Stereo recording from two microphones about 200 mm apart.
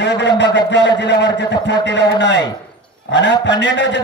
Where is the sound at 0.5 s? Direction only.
60° left (ahead or behind).